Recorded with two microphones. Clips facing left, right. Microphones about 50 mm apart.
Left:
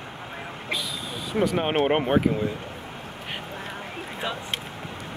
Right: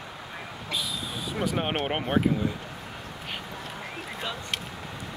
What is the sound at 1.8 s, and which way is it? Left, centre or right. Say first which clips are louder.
Speech: left 5 dB; centre.